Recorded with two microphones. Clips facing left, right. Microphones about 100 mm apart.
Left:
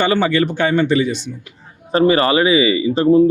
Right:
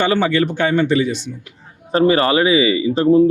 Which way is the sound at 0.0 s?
25° left (ahead or behind).